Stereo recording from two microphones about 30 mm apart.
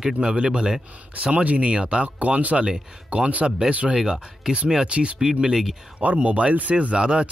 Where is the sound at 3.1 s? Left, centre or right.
Right.